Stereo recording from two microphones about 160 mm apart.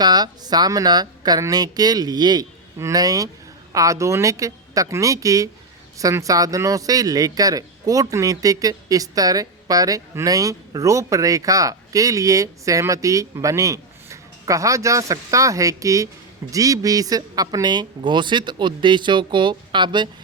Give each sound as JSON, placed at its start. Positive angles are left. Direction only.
{"t": 0.0, "sound": "speech", "side_deg": -25}